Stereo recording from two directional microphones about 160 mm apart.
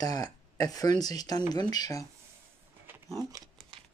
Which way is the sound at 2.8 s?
15° right (ahead or behind).